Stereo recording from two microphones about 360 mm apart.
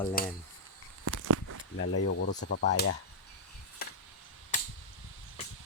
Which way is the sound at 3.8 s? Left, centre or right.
Left.